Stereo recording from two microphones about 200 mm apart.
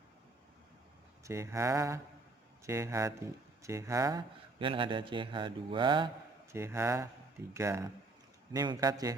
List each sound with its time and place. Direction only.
1.2 s speech: 15° right (ahead or behind)
6.5 s speech: 15° right (ahead or behind)